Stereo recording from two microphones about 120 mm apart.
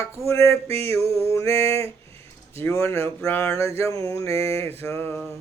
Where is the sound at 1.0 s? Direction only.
55° right (ahead or behind).